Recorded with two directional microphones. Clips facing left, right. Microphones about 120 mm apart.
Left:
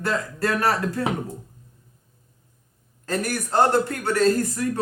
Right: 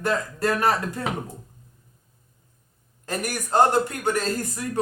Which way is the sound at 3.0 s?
15° right (ahead or behind).